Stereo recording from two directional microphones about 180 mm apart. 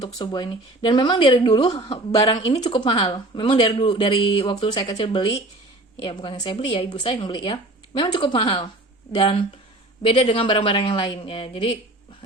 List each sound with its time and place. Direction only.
0.0 s speech: 25° left (ahead or behind)
10.2 s speech: 30° left (ahead or behind)